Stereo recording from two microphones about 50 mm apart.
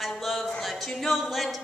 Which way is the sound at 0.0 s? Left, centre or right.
Centre.